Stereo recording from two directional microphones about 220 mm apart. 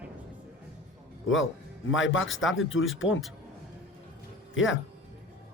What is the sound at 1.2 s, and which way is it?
Speech, 60° left (ahead or behind).